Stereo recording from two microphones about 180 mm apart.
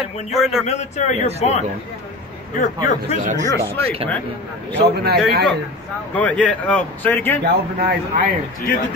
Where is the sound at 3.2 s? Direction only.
40° right (ahead or behind).